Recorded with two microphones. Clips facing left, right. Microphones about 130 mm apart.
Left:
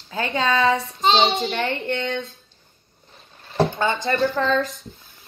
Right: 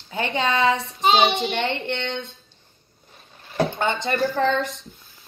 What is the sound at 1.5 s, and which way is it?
Speech, 25° right (ahead or behind).